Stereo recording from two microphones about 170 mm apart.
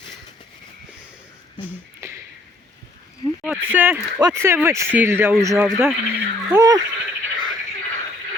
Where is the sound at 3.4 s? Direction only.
10° right (ahead or behind).